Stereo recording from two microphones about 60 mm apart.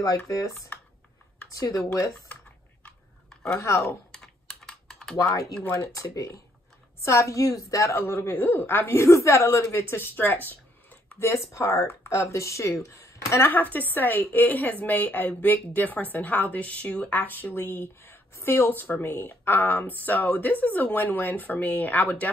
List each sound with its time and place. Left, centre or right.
0.3 s speech: left
3.5 s speech: left
4.1 s typing: centre
5.1 s speech: left
5.6 s speech: left
5.9 s speech: left
7.0 s speech: left
7.9 s a woman's voice: left
11.1 s speech: left
13.5 s a woman's voice: left